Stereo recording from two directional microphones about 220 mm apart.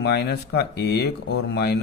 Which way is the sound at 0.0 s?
50° left (ahead or behind).